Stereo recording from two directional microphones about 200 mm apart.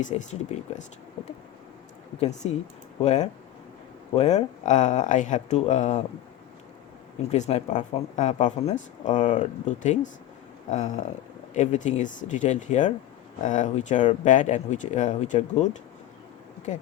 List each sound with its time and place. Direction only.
0.0 s speech: 35° left (ahead or behind)
2.1 s speech: 35° left (ahead or behind)
7.3 s speech: 35° left (ahead or behind)